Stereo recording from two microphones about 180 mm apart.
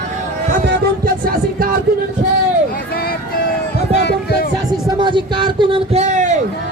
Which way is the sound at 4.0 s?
65° left (ahead or behind).